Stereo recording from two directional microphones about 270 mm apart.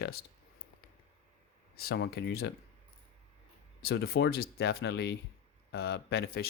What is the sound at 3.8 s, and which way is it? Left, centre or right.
Speech, left.